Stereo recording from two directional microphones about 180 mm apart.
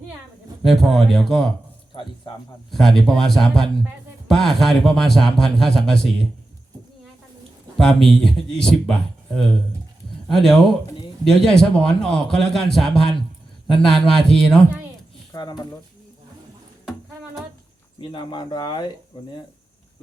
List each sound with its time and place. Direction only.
0.6 s a man's voice: centre (ahead or behind)
2.7 s a man's voice: centre (ahead or behind)
7.8 s a man's voice: 5° left (ahead or behind)
15.3 s a sound: 20° left (ahead or behind)
18.0 s speech: 25° left (ahead or behind)